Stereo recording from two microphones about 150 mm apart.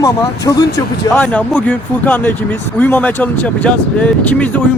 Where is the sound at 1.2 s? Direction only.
10° left (ahead or behind).